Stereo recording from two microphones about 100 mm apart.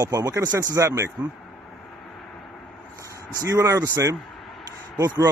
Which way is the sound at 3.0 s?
30° right (ahead or behind).